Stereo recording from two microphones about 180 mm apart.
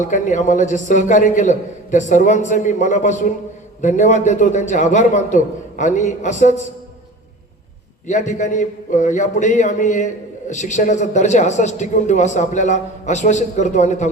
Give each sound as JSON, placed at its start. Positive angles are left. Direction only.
{"t": 0.0, "sound": "a man's voice", "side_deg": 45}
{"t": 8.0, "sound": "a man's voice", "side_deg": 40}